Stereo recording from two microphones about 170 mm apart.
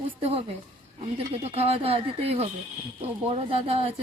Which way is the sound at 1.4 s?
35° right (ahead or behind).